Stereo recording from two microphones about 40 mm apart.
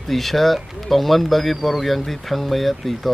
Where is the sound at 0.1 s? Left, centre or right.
Centre.